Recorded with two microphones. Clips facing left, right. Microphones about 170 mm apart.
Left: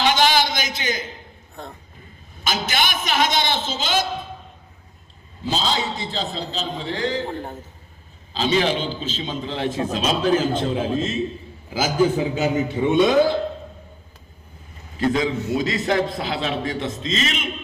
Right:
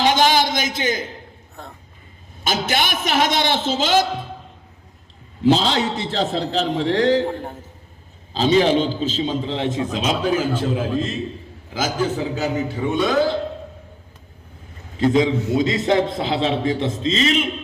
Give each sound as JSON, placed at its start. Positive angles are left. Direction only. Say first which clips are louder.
{"t": 0.0, "sound": "a sound", "louder": "right 2 dB", "side_deg": -45}
{"t": 0.7, "sound": "a man's voice", "louder": "right 4 dB", "side_deg": -50}
{"t": 1.6, "sound": "speech", "louder": "left 2 dB", "side_deg": -5}
{"t": 2.5, "sound": "a man's voice", "louder": "right 2 dB", "side_deg": -60}
{"t": 5.4, "sound": "a man's voice", "louder": "right 7 dB", "side_deg": -70}
{"t": 8.3, "sound": "a man's voice", "louder": "right 5 dB", "side_deg": -45}
{"t": 14.9, "sound": "a man's voice", "louder": "right 4 dB", "side_deg": -25}